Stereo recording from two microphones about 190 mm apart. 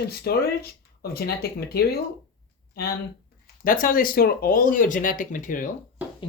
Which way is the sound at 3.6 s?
45° left (ahead or behind).